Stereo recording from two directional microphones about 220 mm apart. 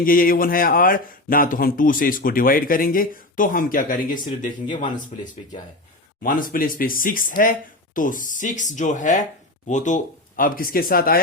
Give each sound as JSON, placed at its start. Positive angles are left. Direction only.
{"t": 0.0, "sound": "speech", "side_deg": 40}